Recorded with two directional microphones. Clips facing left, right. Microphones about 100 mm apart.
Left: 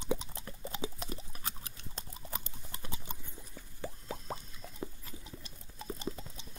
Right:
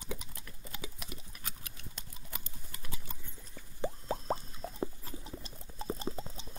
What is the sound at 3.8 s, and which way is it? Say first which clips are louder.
Plop: right 6 dB; 35° right (ahead or behind).